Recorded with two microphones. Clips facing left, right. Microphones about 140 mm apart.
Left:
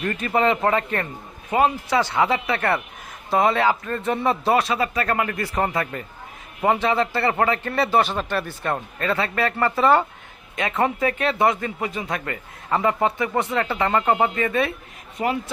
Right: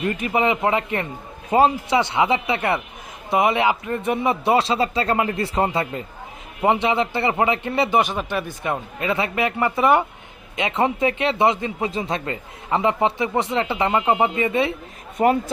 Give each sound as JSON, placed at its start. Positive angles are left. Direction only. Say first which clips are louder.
{"t": 0.0, "sound": "a man's voice", "louder": "even", "side_deg": -15}
{"t": 4.5, "sound": "a man's voice", "louder": "right 2 dB", "side_deg": -25}
{"t": 15.2, "sound": "speech", "louder": "right 6 dB", "side_deg": -45}